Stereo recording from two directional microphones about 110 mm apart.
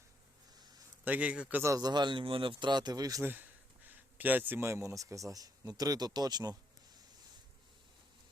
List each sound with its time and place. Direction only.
1.0 s a man's voice: 15° right (ahead or behind)
1.6 s a man's voice: 35° right (ahead or behind)
3.2 s speech: 15° right (ahead or behind); by 7.0 s 35° right (ahead or behind)